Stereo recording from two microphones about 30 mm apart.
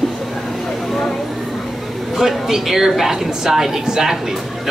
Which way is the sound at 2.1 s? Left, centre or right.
Centre.